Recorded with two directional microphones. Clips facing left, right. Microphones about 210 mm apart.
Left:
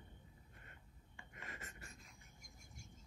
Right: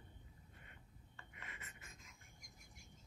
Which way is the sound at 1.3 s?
40° left (ahead or behind).